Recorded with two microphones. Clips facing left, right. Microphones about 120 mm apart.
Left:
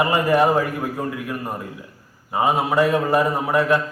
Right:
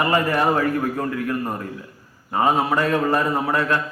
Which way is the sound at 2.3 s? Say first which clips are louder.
Left 1 dB; 15° left (ahead or behind).